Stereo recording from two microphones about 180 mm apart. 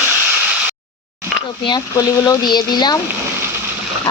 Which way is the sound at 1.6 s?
20° left (ahead or behind).